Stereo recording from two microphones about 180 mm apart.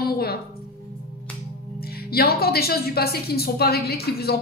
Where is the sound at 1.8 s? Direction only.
60° left (ahead or behind).